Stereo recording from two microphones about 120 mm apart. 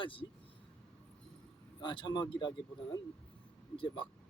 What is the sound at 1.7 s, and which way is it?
Speech, 40° left (ahead or behind).